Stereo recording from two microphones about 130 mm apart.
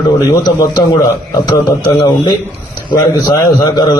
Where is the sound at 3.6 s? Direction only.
35° left (ahead or behind).